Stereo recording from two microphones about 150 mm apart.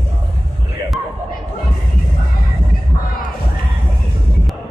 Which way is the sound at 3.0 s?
70° left (ahead or behind).